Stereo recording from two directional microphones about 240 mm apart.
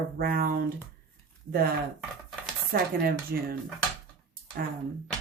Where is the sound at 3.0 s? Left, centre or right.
Right.